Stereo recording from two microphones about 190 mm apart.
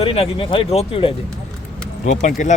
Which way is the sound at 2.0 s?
40° left (ahead or behind).